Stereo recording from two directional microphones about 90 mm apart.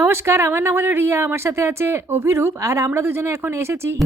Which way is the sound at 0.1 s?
30° right (ahead or behind).